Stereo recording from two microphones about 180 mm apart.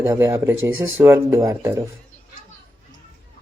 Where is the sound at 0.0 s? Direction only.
15° right (ahead or behind).